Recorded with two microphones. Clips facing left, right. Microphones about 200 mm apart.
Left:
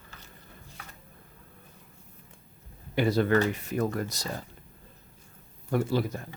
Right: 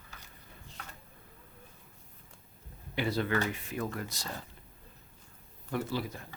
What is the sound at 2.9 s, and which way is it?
Speech, 45° left (ahead or behind).